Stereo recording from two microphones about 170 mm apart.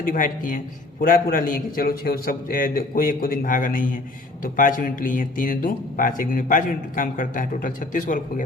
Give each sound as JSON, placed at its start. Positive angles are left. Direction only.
{"t": 0.0, "sound": "a man's voice", "side_deg": 50}